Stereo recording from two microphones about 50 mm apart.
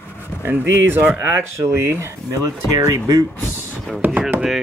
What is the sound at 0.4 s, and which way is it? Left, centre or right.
Speech, right.